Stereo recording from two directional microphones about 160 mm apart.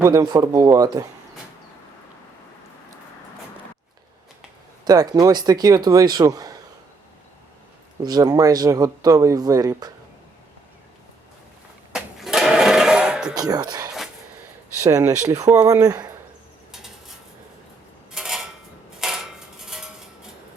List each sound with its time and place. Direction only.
0.0 s speech: 25° right (ahead or behind)
4.9 s speech: 25° right (ahead or behind)
8.0 s speech: 25° right (ahead or behind)
11.9 s a sound: 5° right (ahead or behind)
13.3 s speech: 25° right (ahead or behind)
18.1 s a sound: 5° right (ahead or behind)
18.9 s dishes: 5° right (ahead or behind)